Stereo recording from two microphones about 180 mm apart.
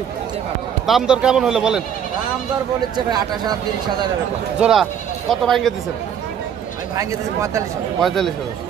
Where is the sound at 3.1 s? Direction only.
20° right (ahead or behind).